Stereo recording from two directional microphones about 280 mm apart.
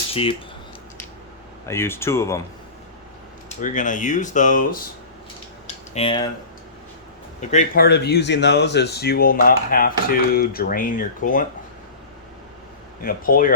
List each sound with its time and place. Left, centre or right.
0.1 s speech: centre
1.6 s speech: centre
3.6 s speech: left
5.6 s typing: left
7.5 s speech: left
13.0 s speech: left